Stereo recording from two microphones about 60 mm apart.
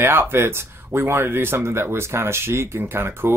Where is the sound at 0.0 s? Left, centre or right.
Right.